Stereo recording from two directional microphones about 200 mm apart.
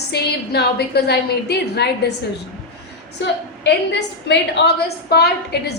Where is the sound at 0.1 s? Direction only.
55° left (ahead or behind).